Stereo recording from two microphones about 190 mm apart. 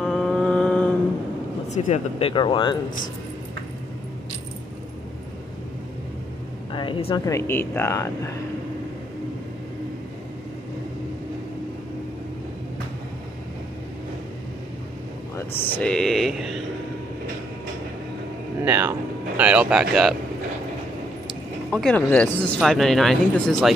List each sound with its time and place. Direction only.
0.0 s mantra: centre (ahead or behind)
1.7 s speech: 35° left (ahead or behind)
6.7 s a sound: 25° left (ahead or behind)
7.2 s speech: 15° left (ahead or behind)
15.8 s speech: 5° left (ahead or behind)
18.6 s speech: 10° right (ahead or behind)
21.6 s speech: centre (ahead or behind)